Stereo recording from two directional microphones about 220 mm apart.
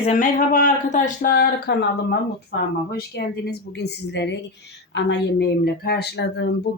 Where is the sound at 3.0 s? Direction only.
45° left (ahead or behind).